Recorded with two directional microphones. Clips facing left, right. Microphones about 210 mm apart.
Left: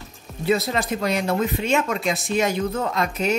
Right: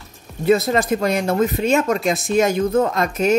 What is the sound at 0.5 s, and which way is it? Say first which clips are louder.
Speech: right 6 dB; 50° right (ahead or behind).